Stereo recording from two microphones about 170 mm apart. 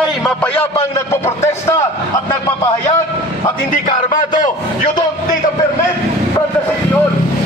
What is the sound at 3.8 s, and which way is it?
A man's voice, 50° left (ahead or behind).